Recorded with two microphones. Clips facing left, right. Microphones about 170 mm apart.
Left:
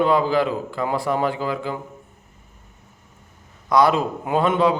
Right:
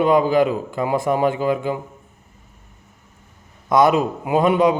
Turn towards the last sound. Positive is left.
turn(degrees=-15)  # may be behind; listen again after turning